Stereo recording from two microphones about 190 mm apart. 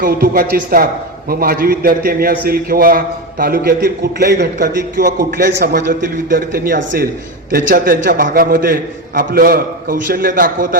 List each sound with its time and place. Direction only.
0.0 s a man's voice: 50° right (ahead or behind)